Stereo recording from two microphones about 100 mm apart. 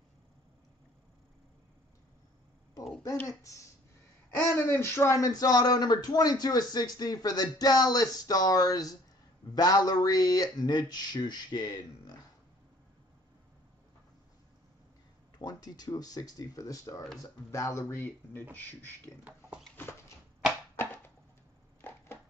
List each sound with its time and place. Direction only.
4.4 s speech: 25° left (ahead or behind); by 12.1 s 45° left (ahead or behind)
15.3 s speech: 40° left (ahead or behind); by 18.9 s 20° left (ahead or behind)
20.7 s a sound: 20° left (ahead or behind)
21.8 s chopping: 25° left (ahead or behind)